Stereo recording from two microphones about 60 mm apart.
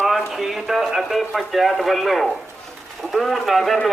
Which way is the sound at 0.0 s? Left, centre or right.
Centre.